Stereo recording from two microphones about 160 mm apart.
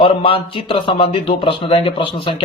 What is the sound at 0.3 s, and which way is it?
A man's voice, 35° left (ahead or behind).